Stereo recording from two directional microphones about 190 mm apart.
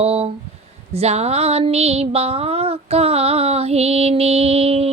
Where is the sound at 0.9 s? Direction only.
35° right (ahead or behind).